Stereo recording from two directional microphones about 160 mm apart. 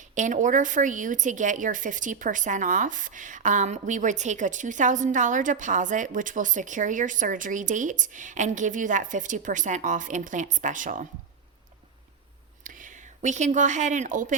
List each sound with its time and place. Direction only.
0.0 s a woman's voice: 50° right (ahead or behind)
12.6 s speech: 55° right (ahead or behind)